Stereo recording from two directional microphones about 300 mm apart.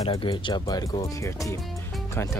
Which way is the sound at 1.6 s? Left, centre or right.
Centre.